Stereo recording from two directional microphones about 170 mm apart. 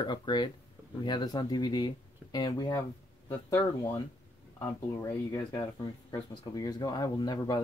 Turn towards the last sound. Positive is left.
turn(degrees=25)  # may be behind; listen again after turning